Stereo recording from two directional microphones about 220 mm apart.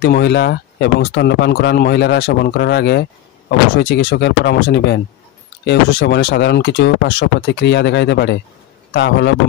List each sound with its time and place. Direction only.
0.0 s speech: 50° left (ahead or behind)